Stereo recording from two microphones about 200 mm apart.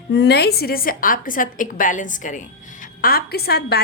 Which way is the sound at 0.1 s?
55° left (ahead or behind).